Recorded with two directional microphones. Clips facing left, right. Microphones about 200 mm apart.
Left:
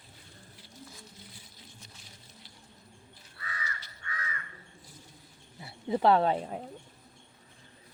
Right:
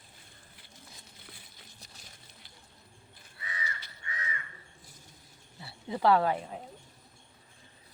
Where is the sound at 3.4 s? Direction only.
20° right (ahead or behind).